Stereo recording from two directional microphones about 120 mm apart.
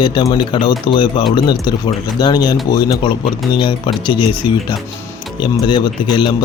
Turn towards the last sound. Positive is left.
turn(degrees=40)  # may be behind; listen again after turning